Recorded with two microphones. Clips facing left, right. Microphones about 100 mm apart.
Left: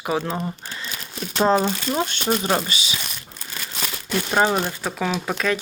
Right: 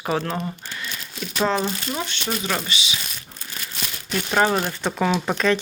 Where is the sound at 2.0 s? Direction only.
45° left (ahead or behind).